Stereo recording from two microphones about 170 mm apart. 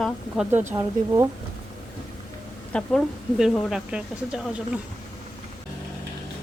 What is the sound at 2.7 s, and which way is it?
Speech, 5° left (ahead or behind).